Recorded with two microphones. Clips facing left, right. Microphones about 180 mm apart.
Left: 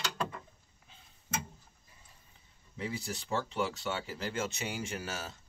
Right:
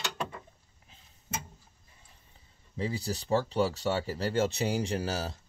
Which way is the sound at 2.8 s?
35° right (ahead or behind).